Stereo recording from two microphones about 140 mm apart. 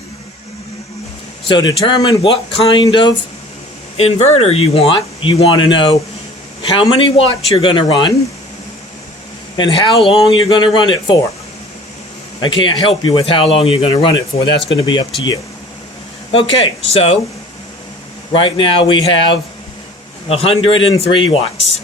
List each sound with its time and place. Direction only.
1.5 s speech: 35° left (ahead or behind)
3.9 s speech: 50° left (ahead or behind)
9.6 s speech: 35° left (ahead or behind)
12.4 s speech: 35° left (ahead or behind)
18.3 s speech: 35° left (ahead or behind)